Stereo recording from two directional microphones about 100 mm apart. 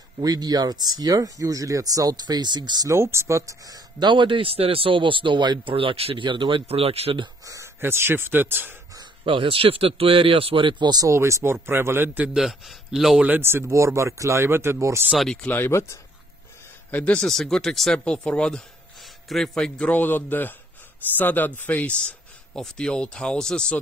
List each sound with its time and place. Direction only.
0.2 s speech: 40° right (ahead or behind)
2.9 s speech: 25° right (ahead or behind); by 5.6 s 50° right (ahead or behind)
5.7 s speech: 60° right (ahead or behind)
6.2 s speech: 55° right (ahead or behind)
6.7 s speech: 85° right
7.4 s speech: 30° right (ahead or behind)
9.2 s speech: 60° right (ahead or behind)
11.1 s speech: 30° right (ahead or behind)
12.4 s a man's voice: 5° right (ahead or behind)
13.3 s speech: 25° right (ahead or behind)
15.4 s speech: 20° left (ahead or behind)
16.9 s speech: 10° left (ahead or behind)